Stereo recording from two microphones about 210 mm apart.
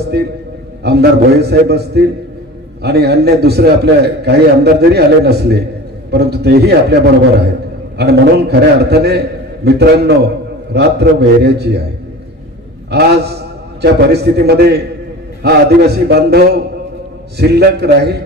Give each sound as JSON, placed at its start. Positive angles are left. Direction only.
{"t": 0.8, "sound": "a man's voice", "side_deg": -50}
{"t": 12.9, "sound": "a man's voice", "side_deg": -50}